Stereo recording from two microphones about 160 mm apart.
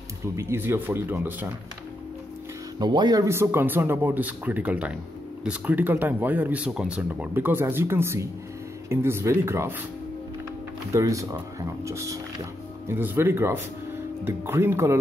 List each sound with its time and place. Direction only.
0.4 s speech: 15° right (ahead or behind)
2.8 s speech: 25° right (ahead or behind)
10.9 s speech: 20° right (ahead or behind)